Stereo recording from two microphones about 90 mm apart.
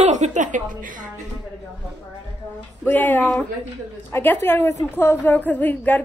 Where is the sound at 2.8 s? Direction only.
20° left (ahead or behind).